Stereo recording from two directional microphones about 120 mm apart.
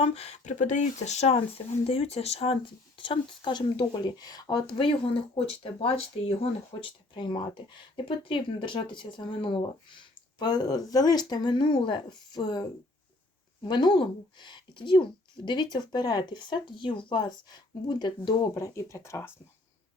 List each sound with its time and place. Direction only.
0.0 s speech: 60° left (ahead or behind); by 12.6 s 35° left (ahead or behind)
13.7 s speech: 35° left (ahead or behind)
18.5 s speech: 25° left (ahead or behind)